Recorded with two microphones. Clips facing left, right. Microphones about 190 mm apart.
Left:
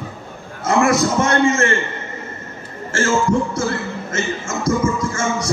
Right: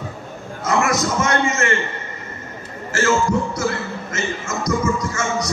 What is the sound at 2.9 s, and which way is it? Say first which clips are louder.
A man's voice: left 1 dB; 30° left (ahead or behind).